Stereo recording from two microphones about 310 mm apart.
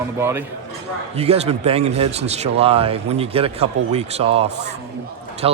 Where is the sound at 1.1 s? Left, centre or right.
Centre.